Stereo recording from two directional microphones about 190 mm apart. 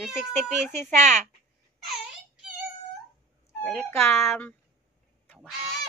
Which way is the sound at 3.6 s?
10° left (ahead or behind).